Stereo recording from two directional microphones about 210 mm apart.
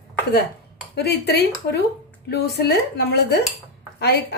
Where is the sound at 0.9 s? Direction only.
50° left (ahead or behind).